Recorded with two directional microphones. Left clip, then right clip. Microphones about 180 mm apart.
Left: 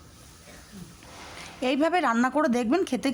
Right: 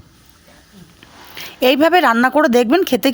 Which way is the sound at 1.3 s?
40° right (ahead or behind).